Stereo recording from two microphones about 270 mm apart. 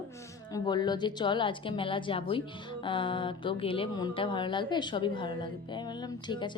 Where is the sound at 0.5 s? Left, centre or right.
Centre.